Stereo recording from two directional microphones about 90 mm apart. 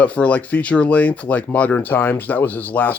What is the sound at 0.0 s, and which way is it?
Speech, 15° left (ahead or behind).